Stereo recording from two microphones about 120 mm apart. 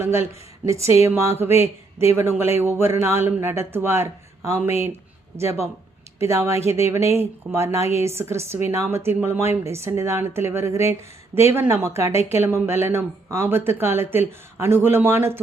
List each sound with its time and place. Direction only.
0.0 s speech: 20° right (ahead or behind)